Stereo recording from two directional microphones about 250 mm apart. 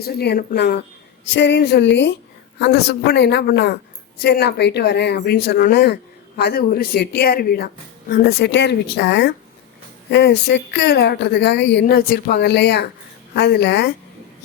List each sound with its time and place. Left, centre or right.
0.0 s speech: left